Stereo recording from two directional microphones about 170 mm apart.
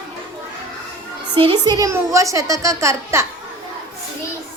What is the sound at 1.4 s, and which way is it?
A woman's voice, 25° right (ahead or behind).